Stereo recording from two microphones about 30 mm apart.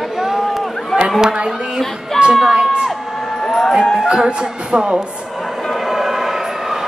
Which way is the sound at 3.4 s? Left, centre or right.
Centre.